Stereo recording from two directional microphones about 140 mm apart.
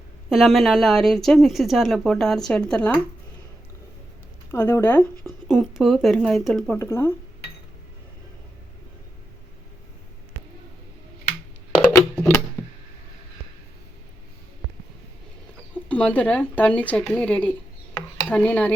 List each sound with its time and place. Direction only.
0.3 s a woman's voice: centre (ahead or behind)
4.5 s speech: 15° left (ahead or behind)
5.2 s a woman's voice: centre (ahead or behind)
6.7 s speech: 20° left (ahead or behind)
11.9 s music: 10° left (ahead or behind)
15.9 s speech: 10° left (ahead or behind)
17.9 s dishes: 10° left (ahead or behind)